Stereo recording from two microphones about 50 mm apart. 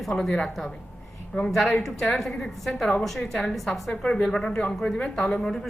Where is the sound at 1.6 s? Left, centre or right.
Centre.